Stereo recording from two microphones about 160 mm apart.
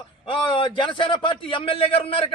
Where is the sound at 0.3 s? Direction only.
30° left (ahead or behind).